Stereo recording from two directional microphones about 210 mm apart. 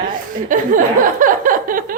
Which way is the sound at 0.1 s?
40° right (ahead or behind).